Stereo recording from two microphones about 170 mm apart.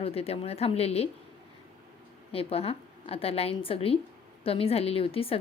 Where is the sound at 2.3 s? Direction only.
35° left (ahead or behind).